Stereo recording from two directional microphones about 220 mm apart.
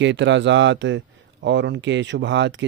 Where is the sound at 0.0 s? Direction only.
55° right (ahead or behind).